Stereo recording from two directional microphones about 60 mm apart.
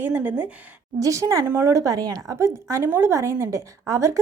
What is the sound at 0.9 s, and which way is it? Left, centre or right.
A woman's voice, right.